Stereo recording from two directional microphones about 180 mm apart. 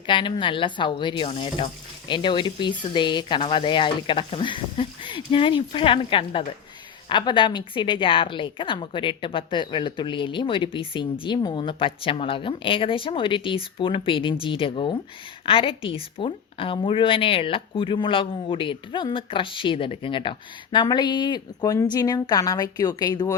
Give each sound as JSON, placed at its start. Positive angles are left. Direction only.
{"t": 0.1, "sound": "a woman's voice", "side_deg": 25}